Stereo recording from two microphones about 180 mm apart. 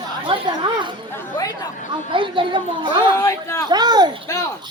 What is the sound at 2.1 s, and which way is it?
Speech, 30° right (ahead or behind).